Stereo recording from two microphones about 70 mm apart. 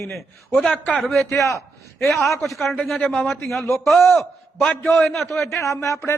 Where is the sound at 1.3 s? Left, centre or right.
Left.